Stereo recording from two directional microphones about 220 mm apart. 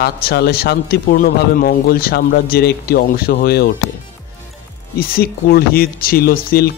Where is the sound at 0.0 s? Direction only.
45° left (ahead or behind).